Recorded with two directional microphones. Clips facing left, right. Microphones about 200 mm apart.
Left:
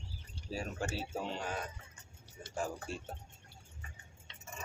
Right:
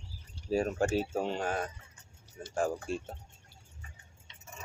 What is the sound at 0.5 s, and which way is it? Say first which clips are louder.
Speech: right 10 dB; 50° right (ahead or behind).